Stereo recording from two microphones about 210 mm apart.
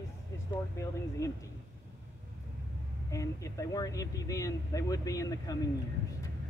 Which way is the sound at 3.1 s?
15° left (ahead or behind).